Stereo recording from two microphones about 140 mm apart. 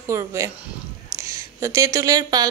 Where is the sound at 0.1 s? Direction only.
20° right (ahead or behind).